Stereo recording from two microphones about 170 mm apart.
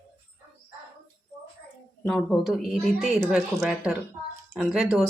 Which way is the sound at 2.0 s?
5° left (ahead or behind).